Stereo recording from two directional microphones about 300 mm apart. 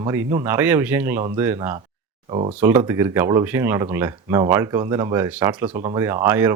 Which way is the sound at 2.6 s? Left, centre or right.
Centre.